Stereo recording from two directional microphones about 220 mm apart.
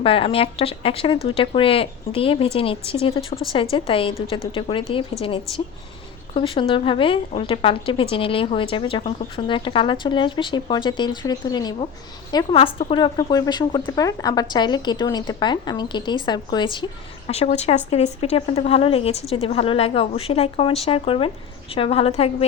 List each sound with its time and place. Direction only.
0.0 s a woman's voice: 25° left (ahead or behind)